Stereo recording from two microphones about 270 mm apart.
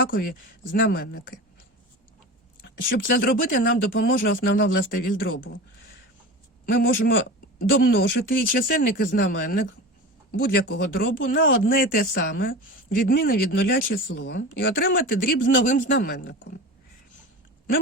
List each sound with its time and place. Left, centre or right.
0.0 s speech: left
2.8 s speech: left
6.7 s speech: left